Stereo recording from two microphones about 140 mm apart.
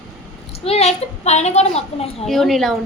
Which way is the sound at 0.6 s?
50° left (ahead or behind).